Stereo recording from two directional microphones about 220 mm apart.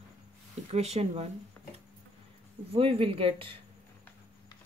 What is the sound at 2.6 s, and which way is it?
Speech, 25° right (ahead or behind).